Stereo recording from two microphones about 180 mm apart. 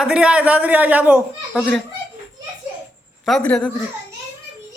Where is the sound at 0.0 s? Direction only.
5° right (ahead or behind).